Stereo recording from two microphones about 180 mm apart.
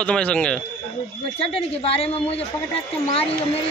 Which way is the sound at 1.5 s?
35° left (ahead or behind).